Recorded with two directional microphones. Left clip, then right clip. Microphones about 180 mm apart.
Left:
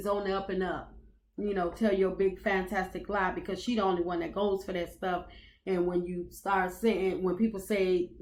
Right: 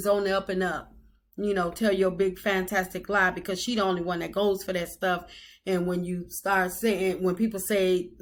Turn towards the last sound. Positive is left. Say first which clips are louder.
# right 4 dB
turn(degrees=-20)  # may be behind; listen again after turning